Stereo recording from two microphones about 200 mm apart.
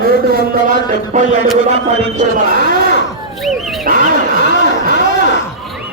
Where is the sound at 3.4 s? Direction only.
Centre (ahead or behind).